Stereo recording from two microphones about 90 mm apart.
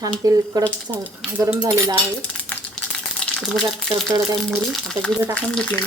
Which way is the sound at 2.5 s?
20° left (ahead or behind).